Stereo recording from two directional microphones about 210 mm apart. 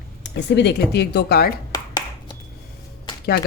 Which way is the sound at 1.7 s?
20° left (ahead or behind).